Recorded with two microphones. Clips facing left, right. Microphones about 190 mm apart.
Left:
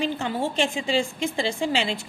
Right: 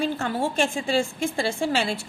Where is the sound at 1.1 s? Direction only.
20° left (ahead or behind).